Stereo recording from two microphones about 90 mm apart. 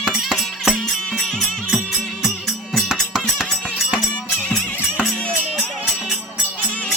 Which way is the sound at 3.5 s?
10° left (ahead or behind).